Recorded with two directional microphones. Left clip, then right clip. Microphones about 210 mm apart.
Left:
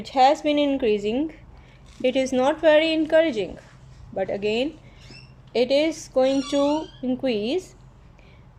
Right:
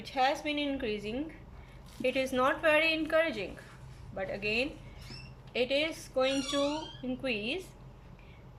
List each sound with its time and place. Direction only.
0.0 s a woman's voice: 35° left (ahead or behind)